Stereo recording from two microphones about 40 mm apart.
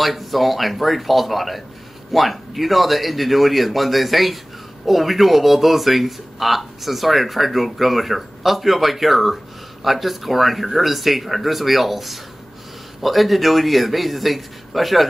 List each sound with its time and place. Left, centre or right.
0.0 s speech: centre